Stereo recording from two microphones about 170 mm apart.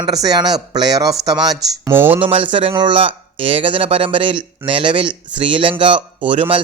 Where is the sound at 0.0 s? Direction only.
20° right (ahead or behind).